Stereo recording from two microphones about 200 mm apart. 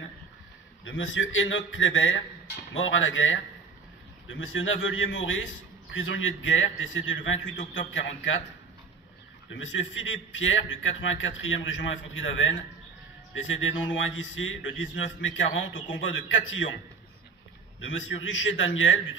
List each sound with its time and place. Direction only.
0.8 s a man's voice: 75° left (ahead or behind)
9.5 s a man's voice: 70° left (ahead or behind)
17.7 s a man's voice: 75° left (ahead or behind)